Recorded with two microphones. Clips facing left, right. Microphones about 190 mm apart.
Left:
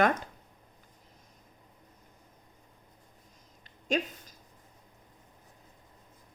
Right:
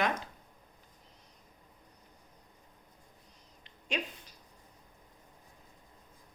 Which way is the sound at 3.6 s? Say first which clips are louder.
Left 7 dB; 45° left (ahead or behind).